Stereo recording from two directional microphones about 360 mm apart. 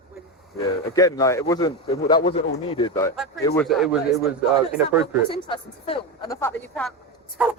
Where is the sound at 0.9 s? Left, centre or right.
Centre.